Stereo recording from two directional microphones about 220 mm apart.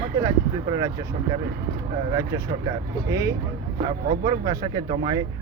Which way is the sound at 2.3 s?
15° right (ahead or behind).